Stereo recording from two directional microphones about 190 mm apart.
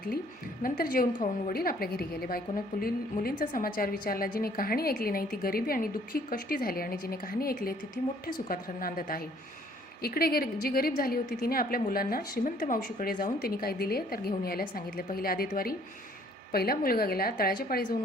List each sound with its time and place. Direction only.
0.6 s a woman's voice: 50° left (ahead or behind)